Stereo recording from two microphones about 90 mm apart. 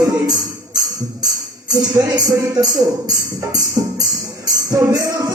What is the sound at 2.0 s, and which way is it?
Music, 45° right (ahead or behind).